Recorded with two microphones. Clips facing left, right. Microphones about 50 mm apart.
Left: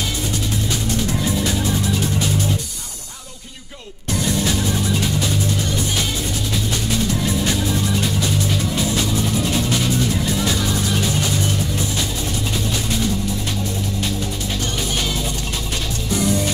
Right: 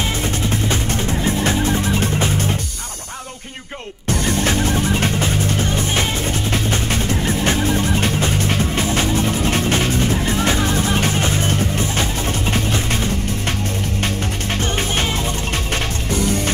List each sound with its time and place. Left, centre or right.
0.0 s music: right
4.1 s music: right